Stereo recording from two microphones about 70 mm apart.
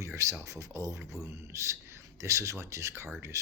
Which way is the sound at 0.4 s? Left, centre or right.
Right.